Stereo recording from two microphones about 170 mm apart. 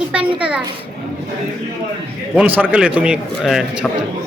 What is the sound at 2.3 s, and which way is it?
A man's voice, 10° right (ahead or behind).